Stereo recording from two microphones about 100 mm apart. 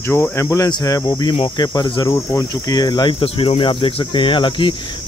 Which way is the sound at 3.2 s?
65° left (ahead or behind).